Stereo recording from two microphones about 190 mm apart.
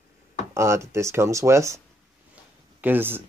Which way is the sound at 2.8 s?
10° right (ahead or behind).